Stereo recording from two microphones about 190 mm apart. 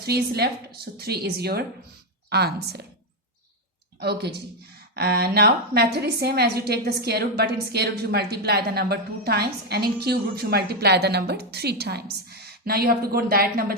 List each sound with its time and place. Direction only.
0.0 s a woman's voice: 55° right (ahead or behind)
4.0 s a woman's voice: 60° right (ahead or behind)